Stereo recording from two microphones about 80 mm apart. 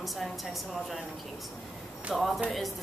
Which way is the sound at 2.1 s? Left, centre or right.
Centre.